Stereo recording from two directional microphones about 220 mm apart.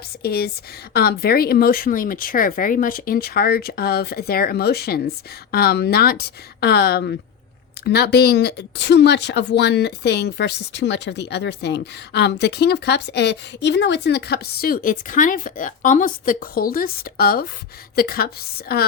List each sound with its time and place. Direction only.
0.2 s speech: 45° left (ahead or behind)